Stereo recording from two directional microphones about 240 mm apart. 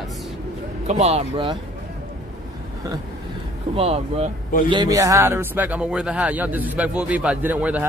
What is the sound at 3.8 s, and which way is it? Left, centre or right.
Speech, right.